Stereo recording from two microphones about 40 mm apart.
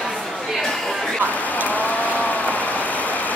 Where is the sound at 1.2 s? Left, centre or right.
Left.